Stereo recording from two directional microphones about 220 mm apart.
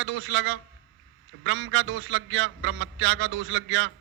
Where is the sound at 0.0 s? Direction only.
60° right (ahead or behind).